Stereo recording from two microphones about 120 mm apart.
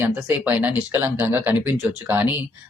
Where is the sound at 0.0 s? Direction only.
15° right (ahead or behind).